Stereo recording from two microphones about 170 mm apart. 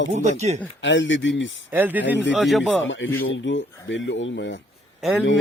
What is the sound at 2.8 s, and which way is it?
Speech, 90° left.